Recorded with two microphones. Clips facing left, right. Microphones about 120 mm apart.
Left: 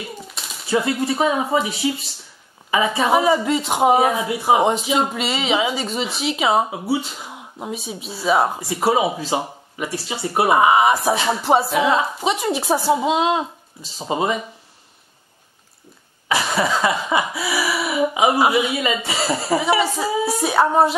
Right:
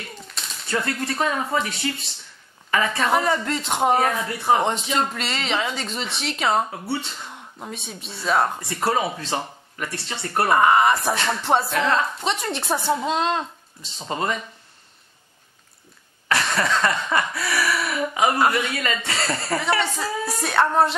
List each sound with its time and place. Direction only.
0.0 s speech: 5° left (ahead or behind)
16.3 s speech: 5° left (ahead or behind)